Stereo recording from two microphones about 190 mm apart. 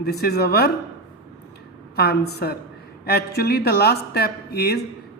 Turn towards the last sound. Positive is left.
turn(degrees=60)  # may be behind; listen again after turning